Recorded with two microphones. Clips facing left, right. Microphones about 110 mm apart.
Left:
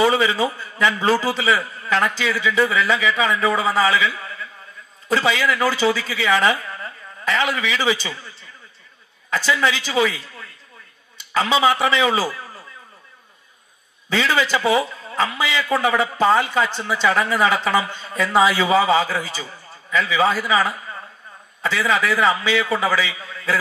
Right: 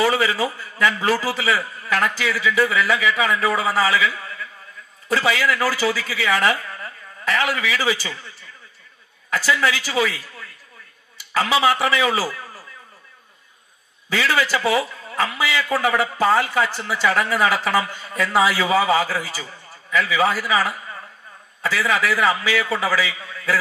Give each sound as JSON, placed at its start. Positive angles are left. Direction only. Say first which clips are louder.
{"t": 0.0, "sound": "a man's voice", "louder": "left 2 dB", "side_deg": 20}
{"t": 14.0, "sound": "a man's voice", "louder": "left 1 dB", "side_deg": 20}